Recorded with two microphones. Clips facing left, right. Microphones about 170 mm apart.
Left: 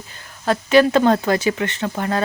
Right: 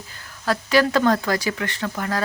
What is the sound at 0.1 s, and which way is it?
Speech, 20° left (ahead or behind).